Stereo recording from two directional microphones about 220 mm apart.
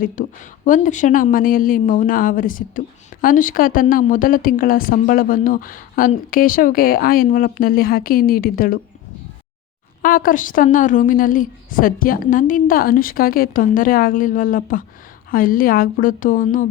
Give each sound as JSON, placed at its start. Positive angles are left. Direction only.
{"t": 0.0, "sound": "a woman's voice", "side_deg": 35}
{"t": 10.0, "sound": "a woman's voice", "side_deg": 40}